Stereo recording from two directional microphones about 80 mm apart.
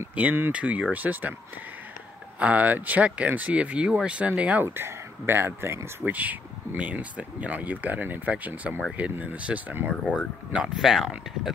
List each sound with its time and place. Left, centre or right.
0.1 s speech: right
2.3 s speech: centre
4.6 s speech: right; by 11.5 s centre